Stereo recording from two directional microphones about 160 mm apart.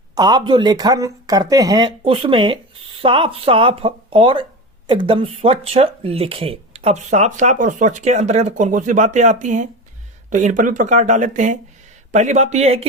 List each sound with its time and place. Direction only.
0.1 s speech: 25° right (ahead or behind); by 12.9 s 40° right (ahead or behind)